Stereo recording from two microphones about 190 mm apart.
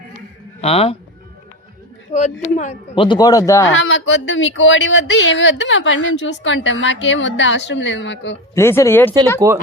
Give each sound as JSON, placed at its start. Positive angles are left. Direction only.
{"t": 0.6, "sound": "speech", "side_deg": 30}
{"t": 2.1, "sound": "speech", "side_deg": 35}
{"t": 3.7, "sound": "speech", "side_deg": 80}
{"t": 8.5, "sound": "speech", "side_deg": 15}
{"t": 9.4, "sound": "speech", "side_deg": -15}